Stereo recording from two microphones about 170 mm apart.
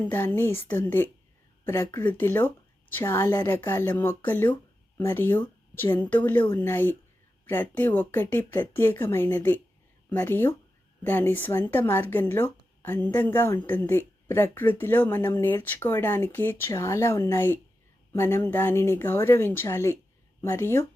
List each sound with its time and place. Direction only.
0.0 s speech: 10° left (ahead or behind)